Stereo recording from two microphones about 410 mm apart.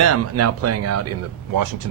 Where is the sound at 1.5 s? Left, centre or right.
Right.